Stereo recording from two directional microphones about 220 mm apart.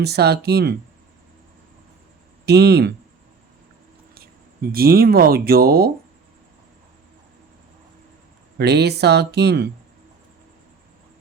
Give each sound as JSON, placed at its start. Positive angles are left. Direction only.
{"t": 0.0, "sound": "speech", "side_deg": -45}
{"t": 2.5, "sound": "speech", "side_deg": -50}
{"t": 4.7, "sound": "speech", "side_deg": -45}
{"t": 8.5, "sound": "speech", "side_deg": -50}